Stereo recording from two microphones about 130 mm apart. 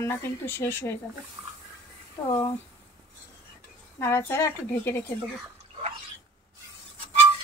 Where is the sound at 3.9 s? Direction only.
20° left (ahead or behind).